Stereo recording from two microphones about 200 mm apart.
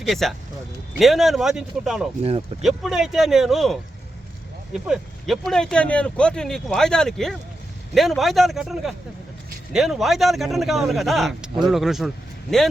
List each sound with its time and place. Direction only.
0.1 s speech: centre (ahead or behind)
2.2 s speech: 30° right (ahead or behind)
2.6 s speech: centre (ahead or behind)